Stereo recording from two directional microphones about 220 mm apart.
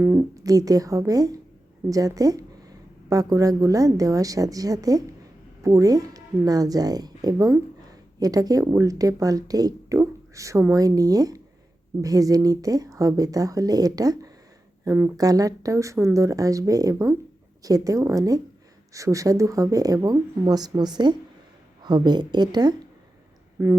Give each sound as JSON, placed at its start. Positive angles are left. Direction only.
{"t": 0.0, "sound": "a woman's voice", "side_deg": -15}